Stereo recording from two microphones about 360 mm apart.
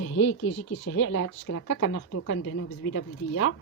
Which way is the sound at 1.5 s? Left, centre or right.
Left.